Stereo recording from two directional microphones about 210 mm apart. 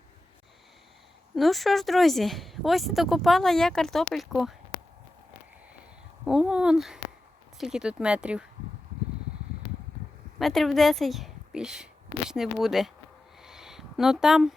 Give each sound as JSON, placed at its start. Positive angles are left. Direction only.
{"t": 1.4, "sound": "speech", "side_deg": 0}
{"t": 6.2, "sound": "speech", "side_deg": -5}
{"t": 10.3, "sound": "a woman's voice", "side_deg": 0}
{"t": 13.4, "sound": "a sound", "side_deg": 0}